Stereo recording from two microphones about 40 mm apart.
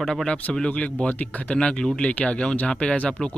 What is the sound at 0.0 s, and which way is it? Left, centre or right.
Speech, centre.